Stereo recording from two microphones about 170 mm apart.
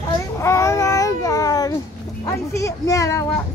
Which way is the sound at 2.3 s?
20° left (ahead or behind).